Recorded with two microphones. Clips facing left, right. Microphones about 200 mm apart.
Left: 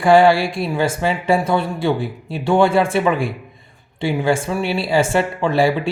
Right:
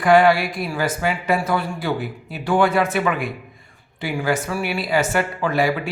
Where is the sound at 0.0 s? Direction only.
30° left (ahead or behind).